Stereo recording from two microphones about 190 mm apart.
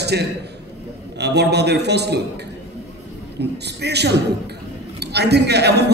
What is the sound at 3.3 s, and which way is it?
A man's voice, 60° right (ahead or behind).